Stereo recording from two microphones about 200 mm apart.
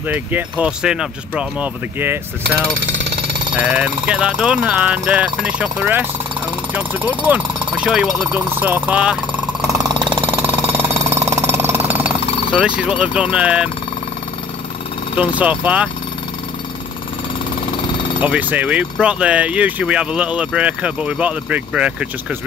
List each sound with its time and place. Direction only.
0.1 s speech: 10° right (ahead or behind)
3.5 s speech: 5° right (ahead or behind)
9.8 s jackhammer: 25° right (ahead or behind)
10.3 s jackhammer: 10° right (ahead or behind)
15.1 s speech: 5° right (ahead or behind)
18.2 s speech: 5° right (ahead or behind)